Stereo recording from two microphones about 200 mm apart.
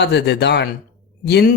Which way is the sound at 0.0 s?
60° left (ahead or behind).